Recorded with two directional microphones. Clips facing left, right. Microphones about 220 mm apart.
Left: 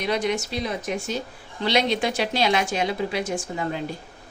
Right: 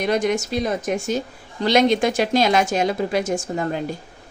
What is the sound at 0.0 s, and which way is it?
A woman's voice, 50° right (ahead or behind).